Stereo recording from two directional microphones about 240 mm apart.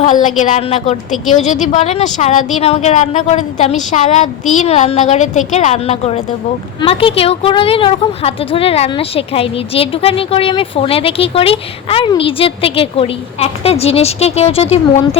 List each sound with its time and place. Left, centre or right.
0.0 s a woman's voice: left